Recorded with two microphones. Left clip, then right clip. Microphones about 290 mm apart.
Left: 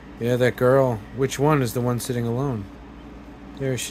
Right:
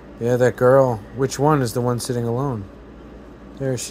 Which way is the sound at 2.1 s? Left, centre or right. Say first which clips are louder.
Right 3 dB; centre.